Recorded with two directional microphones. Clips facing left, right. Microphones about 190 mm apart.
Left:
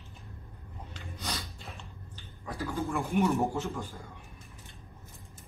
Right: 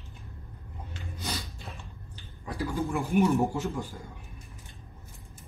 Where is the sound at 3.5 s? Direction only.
15° right (ahead or behind).